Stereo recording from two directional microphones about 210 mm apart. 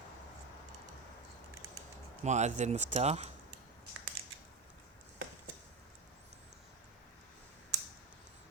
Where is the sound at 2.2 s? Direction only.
35° right (ahead or behind).